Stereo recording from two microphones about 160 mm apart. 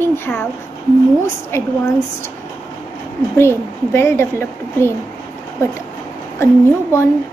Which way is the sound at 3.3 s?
15° left (ahead or behind).